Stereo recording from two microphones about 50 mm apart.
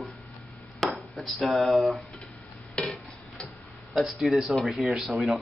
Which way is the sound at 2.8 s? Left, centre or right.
Left.